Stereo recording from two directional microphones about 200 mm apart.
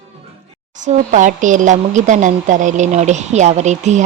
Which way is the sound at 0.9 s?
40° right (ahead or behind).